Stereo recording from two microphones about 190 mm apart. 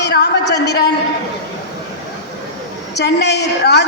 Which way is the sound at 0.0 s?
60° left (ahead or behind).